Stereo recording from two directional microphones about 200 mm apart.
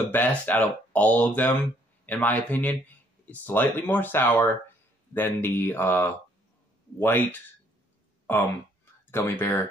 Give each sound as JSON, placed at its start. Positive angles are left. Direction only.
{"t": 0.1, "sound": "speech", "side_deg": 10}
{"t": 9.1, "sound": "speech", "side_deg": 10}